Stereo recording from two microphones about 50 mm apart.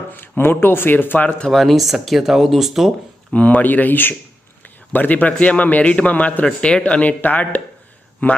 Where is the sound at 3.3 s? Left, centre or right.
Left.